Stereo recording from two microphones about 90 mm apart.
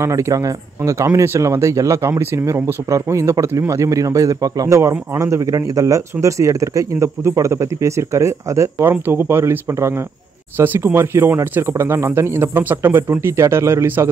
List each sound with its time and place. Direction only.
0.0 s speech: 35° right (ahead or behind)